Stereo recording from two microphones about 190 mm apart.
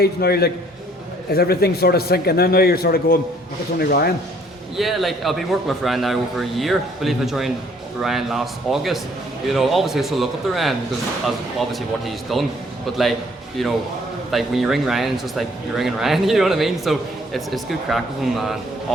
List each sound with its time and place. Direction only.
0.0 s a man's voice: 55° left (ahead or behind)
4.8 s speech: centre (ahead or behind)
13.6 s speech: centre (ahead or behind)